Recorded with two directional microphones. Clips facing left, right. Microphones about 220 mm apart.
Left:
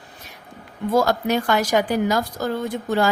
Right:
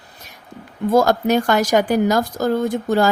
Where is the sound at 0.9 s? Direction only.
45° right (ahead or behind).